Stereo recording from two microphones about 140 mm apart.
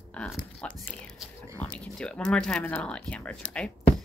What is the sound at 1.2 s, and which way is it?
Speech, 5° right (ahead or behind).